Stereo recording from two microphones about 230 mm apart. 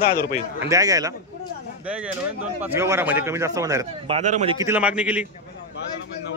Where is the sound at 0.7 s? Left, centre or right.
Centre.